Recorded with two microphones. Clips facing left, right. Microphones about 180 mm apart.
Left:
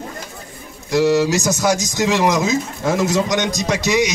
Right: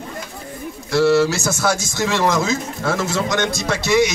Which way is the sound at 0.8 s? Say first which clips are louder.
Even; 15° left (ahead or behind).